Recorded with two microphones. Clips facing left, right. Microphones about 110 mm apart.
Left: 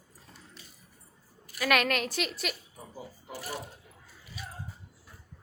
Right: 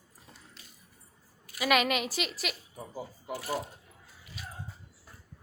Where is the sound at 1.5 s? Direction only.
5° right (ahead or behind).